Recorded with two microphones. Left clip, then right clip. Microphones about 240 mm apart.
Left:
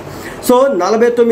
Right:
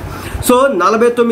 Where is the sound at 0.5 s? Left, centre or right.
Centre.